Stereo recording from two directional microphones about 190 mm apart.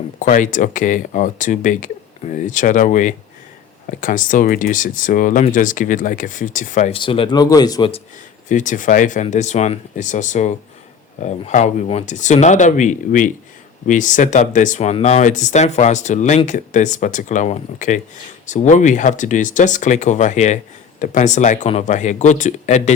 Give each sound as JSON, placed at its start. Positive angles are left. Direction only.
{"t": 0.2, "sound": "speech", "side_deg": 45}
{"t": 7.0, "sound": "speech", "side_deg": 25}
{"t": 8.4, "sound": "speech", "side_deg": 40}